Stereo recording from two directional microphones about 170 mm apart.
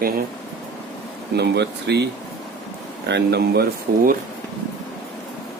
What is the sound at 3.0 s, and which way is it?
Speech, 80° right.